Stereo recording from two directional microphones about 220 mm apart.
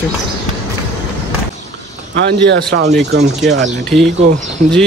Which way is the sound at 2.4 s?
55° right (ahead or behind).